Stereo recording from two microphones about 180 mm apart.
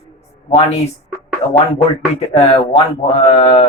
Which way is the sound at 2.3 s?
35° left (ahead or behind).